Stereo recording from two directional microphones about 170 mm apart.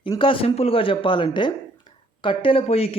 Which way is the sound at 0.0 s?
30° left (ahead or behind).